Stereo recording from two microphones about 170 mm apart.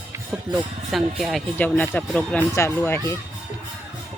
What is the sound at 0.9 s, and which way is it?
Speech, centre (ahead or behind).